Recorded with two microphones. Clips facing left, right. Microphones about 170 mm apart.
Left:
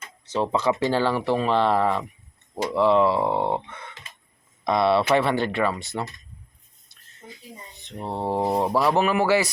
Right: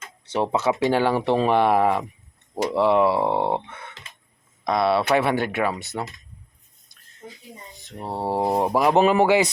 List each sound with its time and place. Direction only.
0.5 s speech: 5° right (ahead or behind)
3.4 s speech: 10° right (ahead or behind)
7.9 s speech: 10° right (ahead or behind)